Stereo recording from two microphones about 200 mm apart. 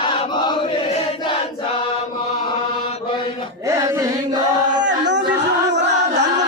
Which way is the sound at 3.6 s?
15° right (ahead or behind).